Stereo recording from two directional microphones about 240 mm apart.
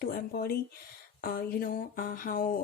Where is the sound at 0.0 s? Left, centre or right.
Left.